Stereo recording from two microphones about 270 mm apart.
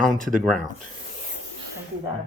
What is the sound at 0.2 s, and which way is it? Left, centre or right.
Speech, right.